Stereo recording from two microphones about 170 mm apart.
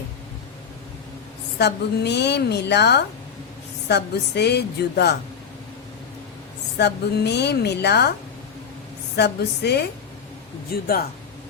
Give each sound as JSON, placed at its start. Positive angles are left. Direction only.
{"t": 1.5, "sound": "a woman's voice", "side_deg": 80}
{"t": 6.7, "sound": "a woman's voice", "side_deg": 80}
{"t": 9.1, "sound": "a woman's voice", "side_deg": 75}
{"t": 10.7, "sound": "speech", "side_deg": 60}